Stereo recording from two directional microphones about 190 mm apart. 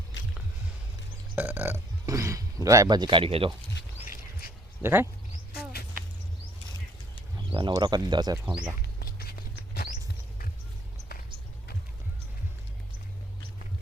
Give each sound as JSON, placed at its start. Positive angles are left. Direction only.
{"t": 0.1, "sound": "a sound", "side_deg": 70}
{"t": 1.4, "sound": "speech", "side_deg": -10}
{"t": 4.8, "sound": "speech", "side_deg": -10}
{"t": 7.5, "sound": "speech", "side_deg": -25}
{"t": 9.0, "sound": "patter", "side_deg": 55}